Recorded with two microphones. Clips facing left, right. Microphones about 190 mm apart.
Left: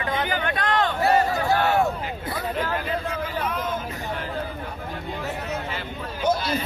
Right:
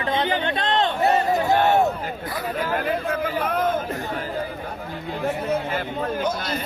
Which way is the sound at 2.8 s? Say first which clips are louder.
Right 4 dB; 55° right (ahead or behind).